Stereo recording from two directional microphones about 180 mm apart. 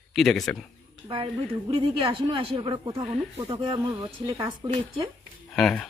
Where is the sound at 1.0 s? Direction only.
30° right (ahead or behind).